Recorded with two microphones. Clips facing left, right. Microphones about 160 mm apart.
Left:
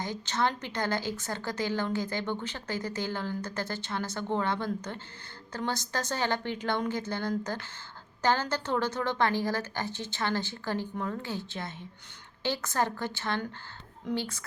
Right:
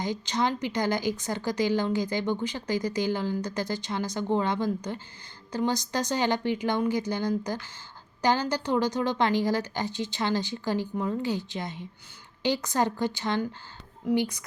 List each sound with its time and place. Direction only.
0.0 s a woman's voice: 15° right (ahead or behind)